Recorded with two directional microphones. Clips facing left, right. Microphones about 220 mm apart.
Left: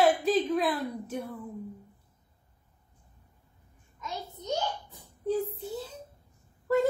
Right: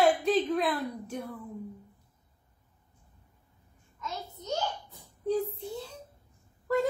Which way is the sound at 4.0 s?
15° left (ahead or behind).